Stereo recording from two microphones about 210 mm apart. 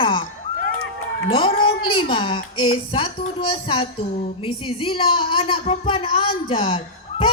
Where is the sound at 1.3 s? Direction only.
25° left (ahead or behind).